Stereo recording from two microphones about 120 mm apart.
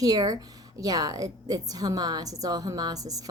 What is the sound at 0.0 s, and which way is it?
A woman's voice, 30° right (ahead or behind).